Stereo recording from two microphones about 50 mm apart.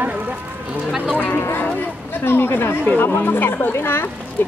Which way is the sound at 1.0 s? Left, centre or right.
Centre.